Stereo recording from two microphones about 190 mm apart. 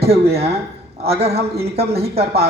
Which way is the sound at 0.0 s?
30° right (ahead or behind).